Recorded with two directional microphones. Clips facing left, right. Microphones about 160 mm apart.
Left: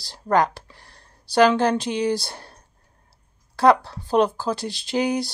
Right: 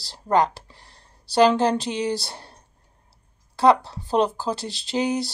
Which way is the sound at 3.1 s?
25° right (ahead or behind).